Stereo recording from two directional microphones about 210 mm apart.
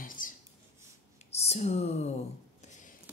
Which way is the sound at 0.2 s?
40° left (ahead or behind).